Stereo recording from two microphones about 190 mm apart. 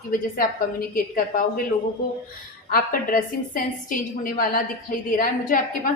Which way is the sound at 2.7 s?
50° left (ahead or behind).